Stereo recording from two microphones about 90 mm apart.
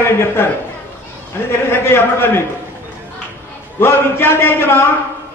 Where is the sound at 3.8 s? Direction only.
25° left (ahead or behind).